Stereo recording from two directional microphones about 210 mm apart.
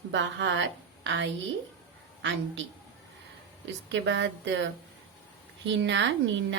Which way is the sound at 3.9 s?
60° right (ahead or behind).